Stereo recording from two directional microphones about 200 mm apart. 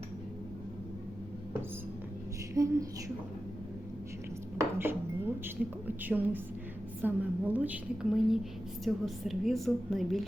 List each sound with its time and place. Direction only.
2.6 s a woman's voice: 15° right (ahead or behind)
4.5 s cutlery: 10° right (ahead or behind)
6.1 s a woman's voice: 10° right (ahead or behind)